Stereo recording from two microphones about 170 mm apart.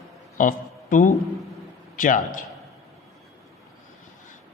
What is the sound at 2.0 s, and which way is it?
Speech, 50° left (ahead or behind).